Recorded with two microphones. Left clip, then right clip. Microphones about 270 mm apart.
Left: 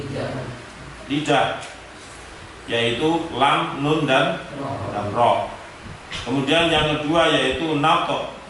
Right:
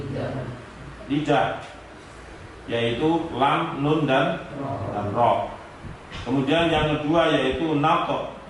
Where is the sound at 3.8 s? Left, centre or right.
Right.